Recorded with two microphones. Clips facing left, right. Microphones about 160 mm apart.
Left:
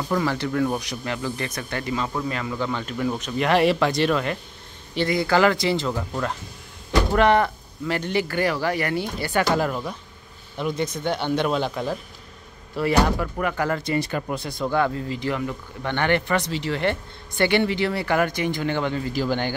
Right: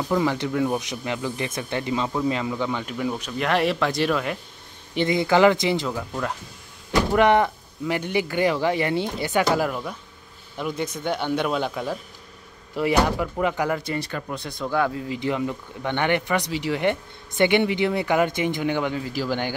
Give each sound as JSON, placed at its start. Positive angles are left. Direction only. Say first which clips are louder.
{"t": 0.1, "sound": "speech", "louder": "right 1 dB", "side_deg": -15}
{"t": 4.9, "sound": "speech", "louder": "right 1 dB", "side_deg": -20}
{"t": 7.2, "sound": "speech", "louder": "right 1 dB", "side_deg": -15}
{"t": 10.6, "sound": "speech", "louder": "left 2 dB", "side_deg": -10}
{"t": 12.7, "sound": "speech", "louder": "even", "side_deg": -15}
{"t": 13.9, "sound": "speech", "louder": "left 4 dB", "side_deg": 10}
{"t": 15.1, "sound": "speech", "louder": "right 1 dB", "side_deg": -20}